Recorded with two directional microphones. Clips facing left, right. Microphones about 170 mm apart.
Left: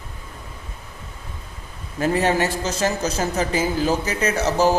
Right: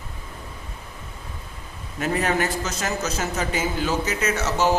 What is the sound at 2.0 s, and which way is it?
A man's voice, 30° left (ahead or behind).